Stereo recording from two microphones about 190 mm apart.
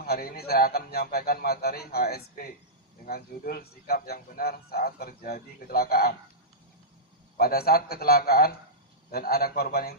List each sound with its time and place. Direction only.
0.0 s a man's voice: 55° left (ahead or behind)
7.3 s a man's voice: 55° left (ahead or behind)